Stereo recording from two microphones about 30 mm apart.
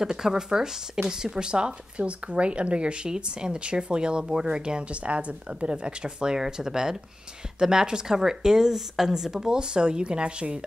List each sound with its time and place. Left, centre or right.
0.0 s speech: right
6.3 s speech: centre
8.7 s speech: centre
9.6 s speech: right